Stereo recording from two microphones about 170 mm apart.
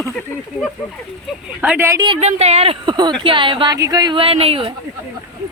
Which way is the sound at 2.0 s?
35° right (ahead or behind).